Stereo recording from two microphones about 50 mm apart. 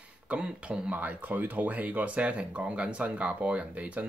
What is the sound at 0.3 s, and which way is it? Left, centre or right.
Speech, right.